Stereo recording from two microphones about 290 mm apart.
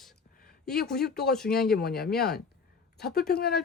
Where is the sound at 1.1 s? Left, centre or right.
Left.